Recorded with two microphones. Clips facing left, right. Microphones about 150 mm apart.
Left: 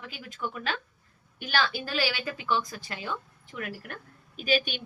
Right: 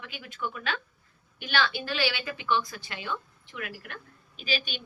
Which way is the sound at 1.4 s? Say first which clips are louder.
Even; 40° left (ahead or behind).